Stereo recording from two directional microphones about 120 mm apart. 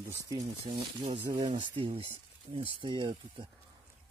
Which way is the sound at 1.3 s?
40° right (ahead or behind).